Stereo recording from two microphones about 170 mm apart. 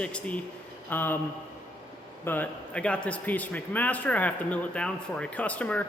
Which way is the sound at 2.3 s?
10° left (ahead or behind).